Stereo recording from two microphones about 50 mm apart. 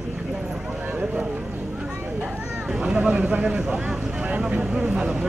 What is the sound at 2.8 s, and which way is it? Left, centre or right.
Speech, centre.